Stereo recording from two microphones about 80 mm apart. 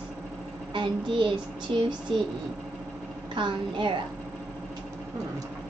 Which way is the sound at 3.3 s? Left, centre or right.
Right.